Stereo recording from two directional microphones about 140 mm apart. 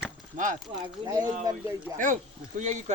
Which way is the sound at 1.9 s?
65° right (ahead or behind).